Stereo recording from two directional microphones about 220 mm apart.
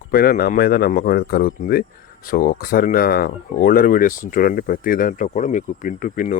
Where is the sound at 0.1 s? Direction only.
40° left (ahead or behind).